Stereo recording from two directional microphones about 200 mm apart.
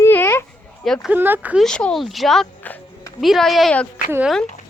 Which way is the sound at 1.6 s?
5° left (ahead or behind).